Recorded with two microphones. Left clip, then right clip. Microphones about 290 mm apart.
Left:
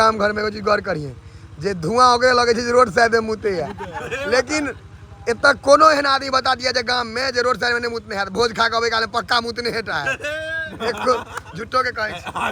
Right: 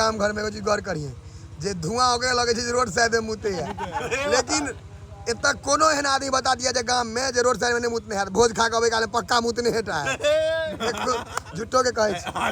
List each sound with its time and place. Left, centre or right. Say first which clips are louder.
0.0 s a man's voice: left 6 dB; centre
4.0 s speech: even; right
4.3 s a man's voice: left 6 dB; centre
10.1 s speech: right 3 dB; right
10.8 s a man's voice: left 5 dB; centre